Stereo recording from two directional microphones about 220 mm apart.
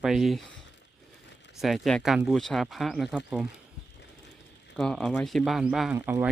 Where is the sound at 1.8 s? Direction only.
Centre (ahead or behind).